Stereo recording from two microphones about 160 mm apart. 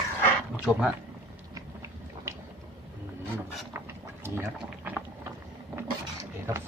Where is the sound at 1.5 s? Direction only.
15° right (ahead or behind).